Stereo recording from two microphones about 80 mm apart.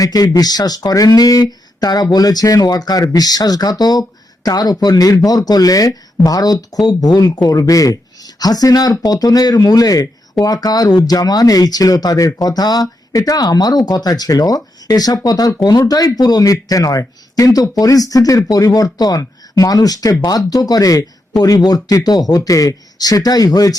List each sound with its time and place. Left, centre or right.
0.0 s speech: left